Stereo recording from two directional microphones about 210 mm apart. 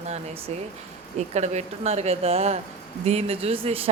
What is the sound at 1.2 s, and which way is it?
A woman's voice, 30° right (ahead or behind).